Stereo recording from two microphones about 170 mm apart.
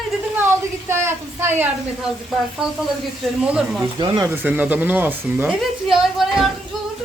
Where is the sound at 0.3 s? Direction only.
15° right (ahead or behind).